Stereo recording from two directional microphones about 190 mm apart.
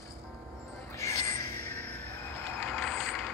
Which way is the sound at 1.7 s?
10° left (ahead or behind).